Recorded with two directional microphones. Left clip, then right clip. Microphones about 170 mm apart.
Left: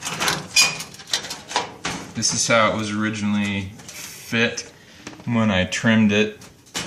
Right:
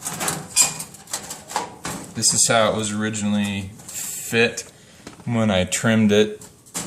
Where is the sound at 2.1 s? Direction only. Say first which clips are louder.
Even; 55° right (ahead or behind).